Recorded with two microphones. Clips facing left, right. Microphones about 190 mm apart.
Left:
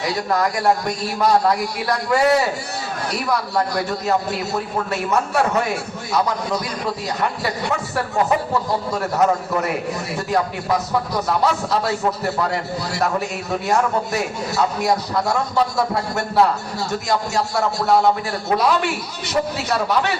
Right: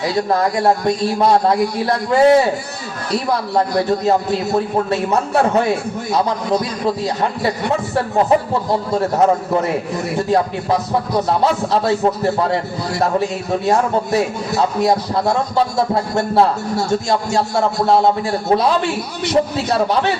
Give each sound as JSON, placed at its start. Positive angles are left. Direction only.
{"t": 0.0, "sound": "a man's voice", "side_deg": -30}
{"t": 13.7, "sound": "a man's voice", "side_deg": -30}